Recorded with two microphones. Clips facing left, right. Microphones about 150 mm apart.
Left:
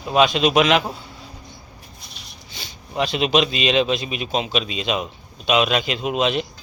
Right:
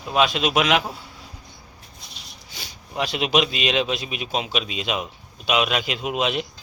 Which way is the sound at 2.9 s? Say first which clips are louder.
Left 3 dB; 5° right (ahead or behind).